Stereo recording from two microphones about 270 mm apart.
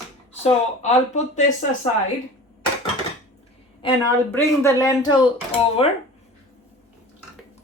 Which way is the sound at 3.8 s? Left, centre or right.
Centre.